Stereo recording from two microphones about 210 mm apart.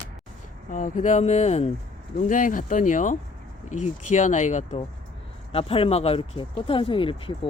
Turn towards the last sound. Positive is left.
turn(degrees=25)  # may be behind; listen again after turning